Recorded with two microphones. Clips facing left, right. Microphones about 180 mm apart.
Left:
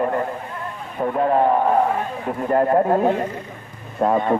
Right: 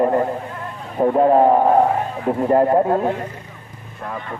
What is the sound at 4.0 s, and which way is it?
Speech, 55° left (ahead or behind).